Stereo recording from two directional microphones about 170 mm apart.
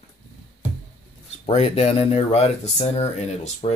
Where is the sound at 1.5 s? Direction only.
40° left (ahead or behind).